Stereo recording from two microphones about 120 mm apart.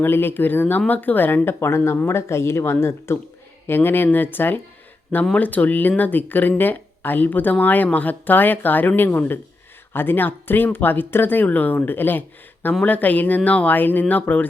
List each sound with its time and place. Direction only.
0.0 s speech: 20° left (ahead or behind)